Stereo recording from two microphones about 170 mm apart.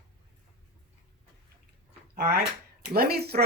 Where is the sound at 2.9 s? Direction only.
65° right (ahead or behind).